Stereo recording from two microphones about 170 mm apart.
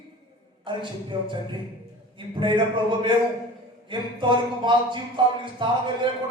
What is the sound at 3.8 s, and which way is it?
Speech, 30° right (ahead or behind).